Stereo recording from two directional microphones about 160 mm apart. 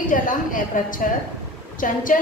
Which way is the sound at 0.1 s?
55° left (ahead or behind).